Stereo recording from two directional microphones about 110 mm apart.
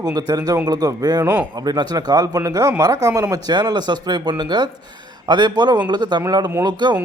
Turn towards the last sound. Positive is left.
turn(degrees=-40)  # may be behind; listen again after turning